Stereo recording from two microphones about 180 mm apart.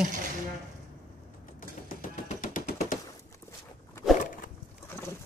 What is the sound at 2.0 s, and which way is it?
Machine gun, 45° left (ahead or behind).